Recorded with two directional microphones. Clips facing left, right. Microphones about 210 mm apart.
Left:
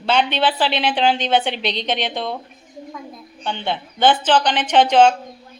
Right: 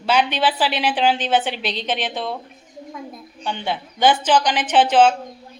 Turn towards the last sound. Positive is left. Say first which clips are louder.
# left 1 dB
turn(degrees=-5)  # may be behind; listen again after turning